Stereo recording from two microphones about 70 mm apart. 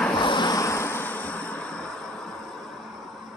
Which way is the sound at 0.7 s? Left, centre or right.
Left.